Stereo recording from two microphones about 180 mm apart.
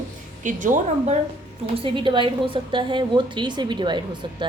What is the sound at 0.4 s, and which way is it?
Speech, 45° right (ahead or behind).